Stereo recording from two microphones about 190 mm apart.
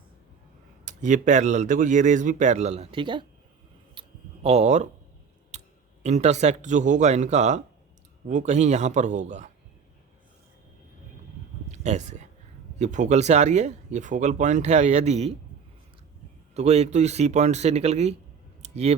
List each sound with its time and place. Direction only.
0.9 s speech: 40° right (ahead or behind); by 3.2 s 25° right (ahead or behind)
4.4 s speech: 35° right (ahead or behind)
11.7 s speech: 35° right (ahead or behind)
16.6 s speech: 35° right (ahead or behind)
18.6 s clicking: 35° right (ahead or behind)